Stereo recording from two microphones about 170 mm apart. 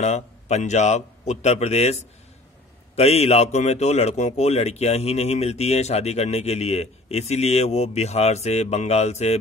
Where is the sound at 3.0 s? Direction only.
40° left (ahead or behind).